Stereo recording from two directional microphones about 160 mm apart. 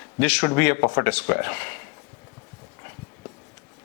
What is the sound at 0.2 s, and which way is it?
Speech, 5° left (ahead or behind).